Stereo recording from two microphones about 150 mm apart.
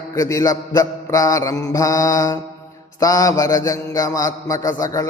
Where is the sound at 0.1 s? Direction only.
20° left (ahead or behind).